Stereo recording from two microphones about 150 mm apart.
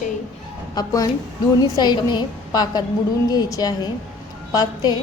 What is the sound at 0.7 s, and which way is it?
A woman's voice, 25° left (ahead or behind).